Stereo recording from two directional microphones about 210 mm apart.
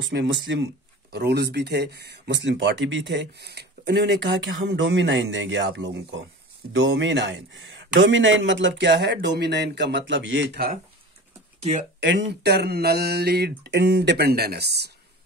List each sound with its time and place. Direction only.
0.1 s speech: 55° right (ahead or behind)
12.0 s speech: 55° right (ahead or behind)